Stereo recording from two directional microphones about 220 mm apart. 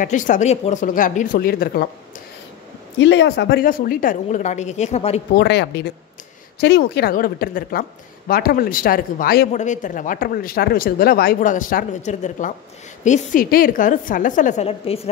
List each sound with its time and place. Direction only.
0.0 s speech: 35° left (ahead or behind)
3.0 s speech: 55° left (ahead or behind); by 5.2 s 30° left (ahead or behind)
5.4 s speech: 50° left (ahead or behind); by 15.0 s 25° left (ahead or behind)